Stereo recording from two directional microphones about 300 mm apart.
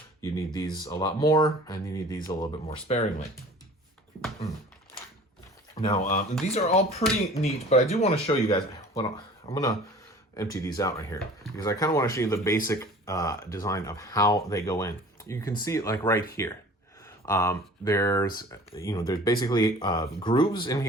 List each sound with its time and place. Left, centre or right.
0.2 s speech: centre
6.0 s speech: left; by 16.2 s centre
17.2 s speech: centre